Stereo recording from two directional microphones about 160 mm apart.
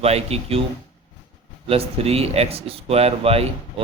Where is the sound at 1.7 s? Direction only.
40° right (ahead or behind).